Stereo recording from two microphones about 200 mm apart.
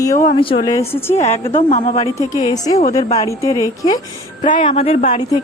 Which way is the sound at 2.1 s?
20° left (ahead or behind).